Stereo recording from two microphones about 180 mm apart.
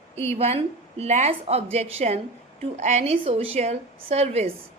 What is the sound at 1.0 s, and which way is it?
A woman's voice, 35° right (ahead or behind).